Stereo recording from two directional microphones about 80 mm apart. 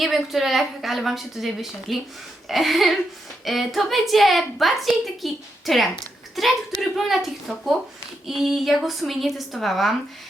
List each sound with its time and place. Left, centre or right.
0.0 s a woman's voice: centre